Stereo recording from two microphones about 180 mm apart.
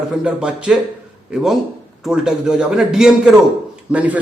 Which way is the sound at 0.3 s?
5° right (ahead or behind).